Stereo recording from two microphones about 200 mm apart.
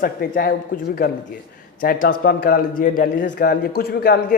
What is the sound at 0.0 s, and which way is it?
A man's voice, 50° left (ahead or behind).